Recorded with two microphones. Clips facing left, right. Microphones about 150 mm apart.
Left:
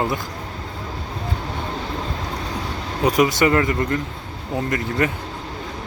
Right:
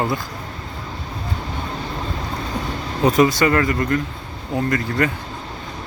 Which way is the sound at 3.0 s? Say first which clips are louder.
Right 2 dB; 10° left (ahead or behind).